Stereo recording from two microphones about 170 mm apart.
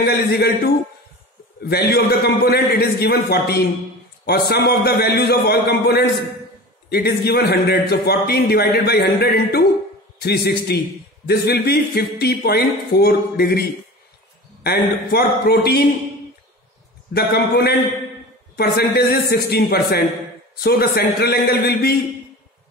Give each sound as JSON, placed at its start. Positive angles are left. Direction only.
{"t": 0.0, "sound": "a man's voice", "side_deg": 65}
{"t": 17.1, "sound": "a man's voice", "side_deg": 65}